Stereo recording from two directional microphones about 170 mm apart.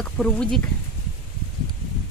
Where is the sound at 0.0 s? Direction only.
5° left (ahead or behind).